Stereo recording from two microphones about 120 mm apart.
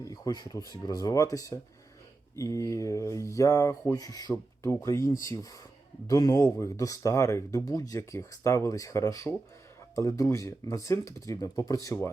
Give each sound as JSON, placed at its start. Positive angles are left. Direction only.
{"t": 0.0, "sound": "speech", "side_deg": 30}